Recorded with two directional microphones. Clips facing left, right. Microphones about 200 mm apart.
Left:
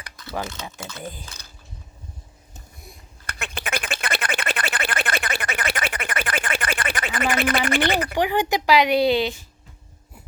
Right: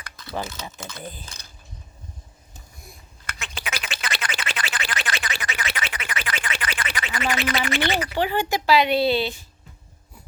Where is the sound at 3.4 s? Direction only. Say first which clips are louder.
Left 5 dB; 55° left (ahead or behind).